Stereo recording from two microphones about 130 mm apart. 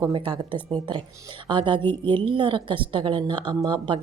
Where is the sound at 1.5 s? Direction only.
40° right (ahead or behind).